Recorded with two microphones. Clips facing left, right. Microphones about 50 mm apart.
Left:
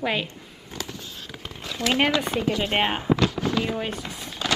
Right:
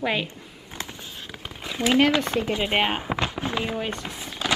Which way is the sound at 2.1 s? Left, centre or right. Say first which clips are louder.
Right 1 dB; centre.